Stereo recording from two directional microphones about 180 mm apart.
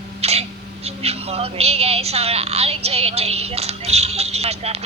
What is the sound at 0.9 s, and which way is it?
A woman's voice, 35° right (ahead or behind).